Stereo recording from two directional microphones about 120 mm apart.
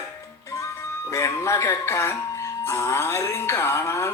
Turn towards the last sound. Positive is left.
turn(degrees=25)  # may be behind; listen again after turning